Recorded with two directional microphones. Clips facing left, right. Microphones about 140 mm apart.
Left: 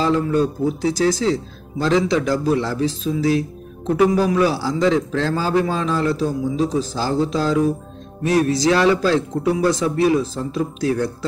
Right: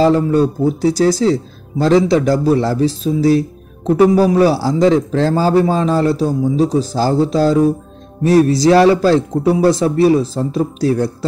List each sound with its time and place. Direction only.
0.0 s speech: 40° right (ahead or behind)